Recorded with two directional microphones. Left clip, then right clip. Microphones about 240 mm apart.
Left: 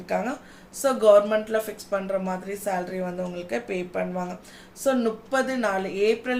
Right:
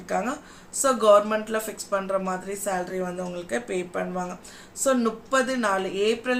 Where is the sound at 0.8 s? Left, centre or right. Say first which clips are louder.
Left 1 dB; centre.